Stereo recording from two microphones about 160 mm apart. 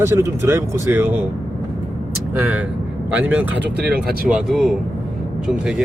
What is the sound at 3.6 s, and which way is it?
Speech, 90° right.